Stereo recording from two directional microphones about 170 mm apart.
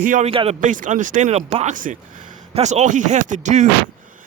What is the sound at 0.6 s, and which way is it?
Speech, 50° right (ahead or behind).